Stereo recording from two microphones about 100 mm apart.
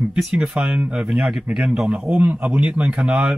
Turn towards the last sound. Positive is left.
turn(degrees=-10)  # may be behind; listen again after turning